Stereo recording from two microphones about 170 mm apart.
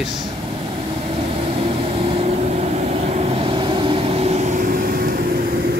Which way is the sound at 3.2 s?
35° right (ahead or behind).